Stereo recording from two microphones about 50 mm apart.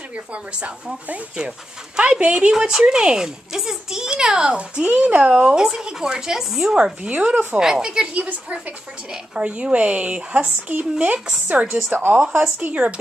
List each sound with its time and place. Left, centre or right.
0.1 s speech: right; by 6.8 s centre
6.8 s speech: right
8.2 s speech: right
12.5 s speech: right